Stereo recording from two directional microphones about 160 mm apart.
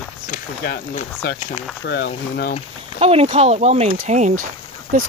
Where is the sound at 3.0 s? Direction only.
40° right (ahead or behind).